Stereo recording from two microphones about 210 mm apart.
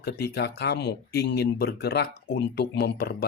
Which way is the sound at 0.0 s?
50° left (ahead or behind).